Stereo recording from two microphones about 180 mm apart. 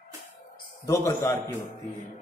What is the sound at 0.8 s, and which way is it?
Speech, 15° left (ahead or behind).